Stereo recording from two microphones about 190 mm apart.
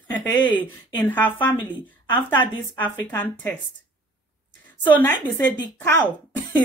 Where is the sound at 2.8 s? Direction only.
10° left (ahead or behind).